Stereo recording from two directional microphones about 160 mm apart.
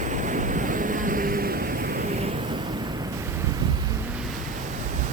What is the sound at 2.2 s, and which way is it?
Waves, 40° right (ahead or behind).